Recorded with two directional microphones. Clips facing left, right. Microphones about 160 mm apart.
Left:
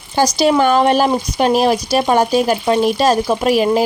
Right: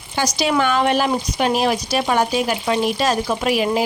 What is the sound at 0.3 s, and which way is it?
Speech, 35° left (ahead or behind).